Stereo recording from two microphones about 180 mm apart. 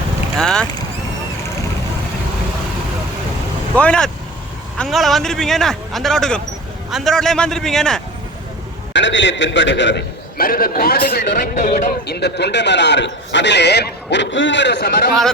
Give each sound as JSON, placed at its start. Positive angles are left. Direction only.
{"t": 0.3, "sound": "speech", "side_deg": 5}
{"t": 3.8, "sound": "speech", "side_deg": 5}
{"t": 8.9, "sound": "a man's voice", "side_deg": 85}
{"t": 10.3, "sound": "a man's voice", "side_deg": 55}
{"t": 11.5, "sound": "a man's voice", "side_deg": 40}
{"t": 11.9, "sound": "speech", "side_deg": 65}